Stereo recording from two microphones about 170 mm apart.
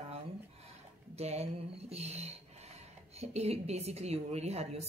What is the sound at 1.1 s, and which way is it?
A woman's voice, 40° right (ahead or behind).